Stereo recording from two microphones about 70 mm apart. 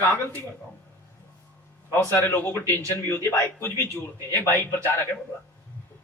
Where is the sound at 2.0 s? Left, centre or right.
Left.